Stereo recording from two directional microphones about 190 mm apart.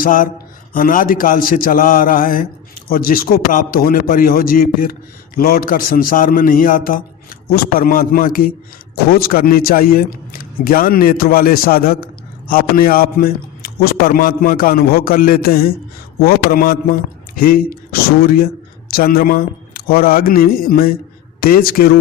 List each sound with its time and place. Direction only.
0.0 s a man's voice: 45° left (ahead or behind)